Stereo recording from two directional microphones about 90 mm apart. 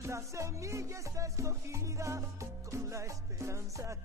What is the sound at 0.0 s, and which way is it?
Music, 35° right (ahead or behind).